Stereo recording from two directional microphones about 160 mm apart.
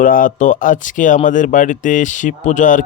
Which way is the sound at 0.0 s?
55° left (ahead or behind).